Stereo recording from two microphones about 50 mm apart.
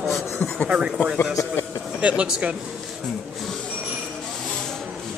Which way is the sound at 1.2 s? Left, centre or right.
Left.